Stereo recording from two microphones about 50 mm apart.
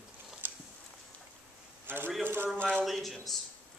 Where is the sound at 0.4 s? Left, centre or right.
Right.